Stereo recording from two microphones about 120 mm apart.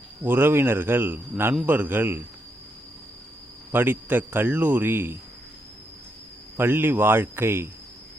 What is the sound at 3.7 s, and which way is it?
Speech, 15° right (ahead or behind).